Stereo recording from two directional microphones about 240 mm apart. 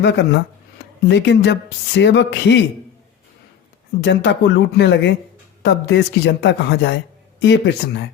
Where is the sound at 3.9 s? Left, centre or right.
Left.